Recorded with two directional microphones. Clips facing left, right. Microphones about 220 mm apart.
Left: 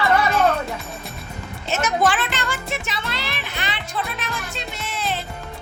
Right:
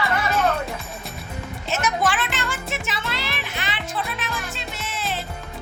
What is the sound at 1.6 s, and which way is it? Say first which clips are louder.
Music: left 3 dB; centre (ahead or behind).